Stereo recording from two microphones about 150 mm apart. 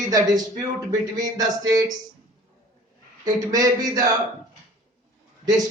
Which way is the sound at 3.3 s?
25° right (ahead or behind).